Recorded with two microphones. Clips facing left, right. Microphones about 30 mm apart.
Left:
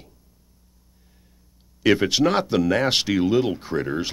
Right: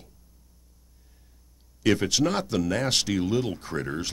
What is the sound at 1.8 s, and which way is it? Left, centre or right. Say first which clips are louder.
Speech: left 5 dB; left.